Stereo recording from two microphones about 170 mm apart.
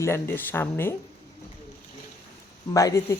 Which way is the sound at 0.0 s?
15° left (ahead or behind).